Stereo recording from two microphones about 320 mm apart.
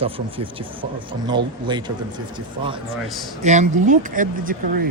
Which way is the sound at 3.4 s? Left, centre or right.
Right.